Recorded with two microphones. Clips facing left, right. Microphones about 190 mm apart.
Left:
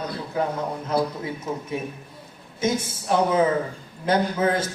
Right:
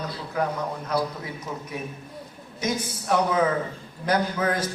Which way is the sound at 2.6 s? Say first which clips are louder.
Left 3 dB; 25° left (ahead or behind).